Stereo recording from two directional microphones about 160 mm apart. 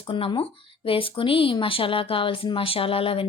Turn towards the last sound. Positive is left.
turn(degrees=35)  # may be behind; listen again after turning